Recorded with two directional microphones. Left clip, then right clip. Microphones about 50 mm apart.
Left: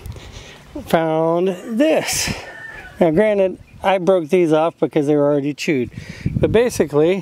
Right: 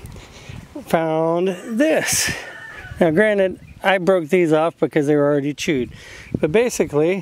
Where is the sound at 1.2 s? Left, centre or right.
Centre; by 5.5 s right.